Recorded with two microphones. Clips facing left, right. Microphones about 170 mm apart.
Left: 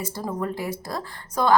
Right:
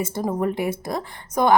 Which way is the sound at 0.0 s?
20° right (ahead or behind).